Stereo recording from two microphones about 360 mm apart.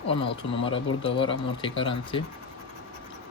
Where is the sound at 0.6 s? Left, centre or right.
Centre.